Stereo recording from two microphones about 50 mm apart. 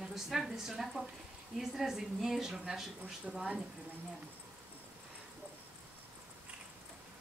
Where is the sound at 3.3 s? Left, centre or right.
Centre.